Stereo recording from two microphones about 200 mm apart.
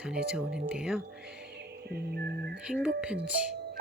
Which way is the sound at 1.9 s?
55° right (ahead or behind).